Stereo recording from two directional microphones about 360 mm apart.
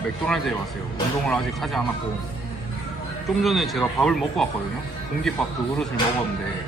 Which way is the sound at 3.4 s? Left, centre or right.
Centre.